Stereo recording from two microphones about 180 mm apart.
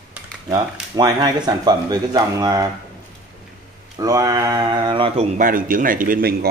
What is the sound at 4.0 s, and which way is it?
Speech, 20° right (ahead or behind).